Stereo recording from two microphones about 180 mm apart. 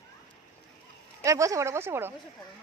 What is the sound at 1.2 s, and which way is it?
Speech, 15° right (ahead or behind).